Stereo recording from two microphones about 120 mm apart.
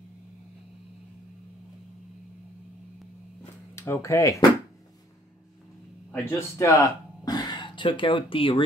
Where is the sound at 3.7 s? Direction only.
25° left (ahead or behind).